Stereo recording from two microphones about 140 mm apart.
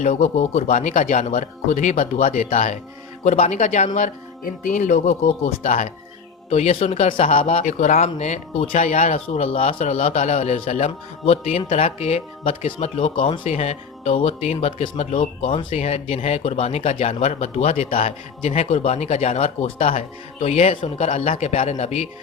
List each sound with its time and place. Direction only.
0.0 s speech: 55° left (ahead or behind)
7.6 s speech: 60° left (ahead or behind)